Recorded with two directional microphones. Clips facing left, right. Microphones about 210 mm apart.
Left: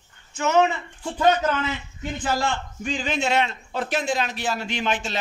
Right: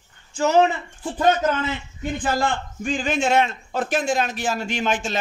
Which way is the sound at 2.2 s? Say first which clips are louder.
Right 1 dB; 50° right (ahead or behind).